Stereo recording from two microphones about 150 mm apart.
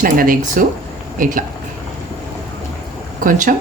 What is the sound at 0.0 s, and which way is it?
A woman's voice, 70° right (ahead or behind).